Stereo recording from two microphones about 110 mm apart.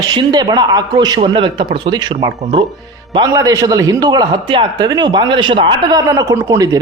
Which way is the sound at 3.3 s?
30° right (ahead or behind).